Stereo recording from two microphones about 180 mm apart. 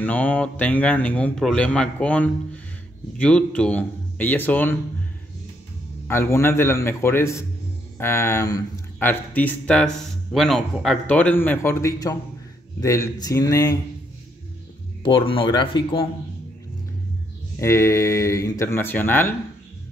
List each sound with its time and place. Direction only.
0.0 s speech: 10° left (ahead or behind)
6.0 s speech: 15° left (ahead or behind)
15.0 s speech: 30° left (ahead or behind)
17.6 s speech: 15° left (ahead or behind)